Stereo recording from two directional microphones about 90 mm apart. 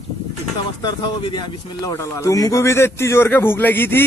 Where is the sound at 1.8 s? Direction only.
30° left (ahead or behind).